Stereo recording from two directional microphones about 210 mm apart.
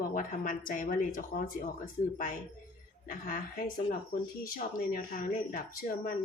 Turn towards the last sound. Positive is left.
turn(degrees=45)  # may be behind; listen again after turning